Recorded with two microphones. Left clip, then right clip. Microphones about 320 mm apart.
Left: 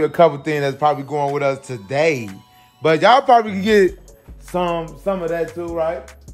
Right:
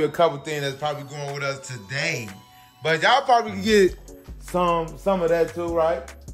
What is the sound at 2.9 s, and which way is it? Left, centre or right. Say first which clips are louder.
Speech: left 6 dB; centre.